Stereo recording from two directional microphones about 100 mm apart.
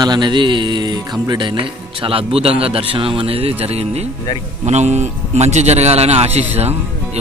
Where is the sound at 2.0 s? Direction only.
70° right (ahead or behind); by 4.1 s 90° right.